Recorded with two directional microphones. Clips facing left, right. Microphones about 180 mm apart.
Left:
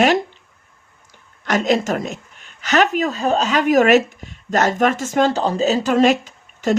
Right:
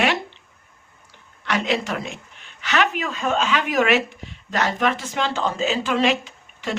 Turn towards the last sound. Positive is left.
turn(degrees=45)  # may be behind; listen again after turning